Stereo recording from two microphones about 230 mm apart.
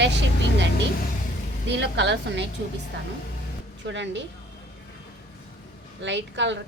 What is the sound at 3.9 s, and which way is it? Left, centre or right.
Speech, right.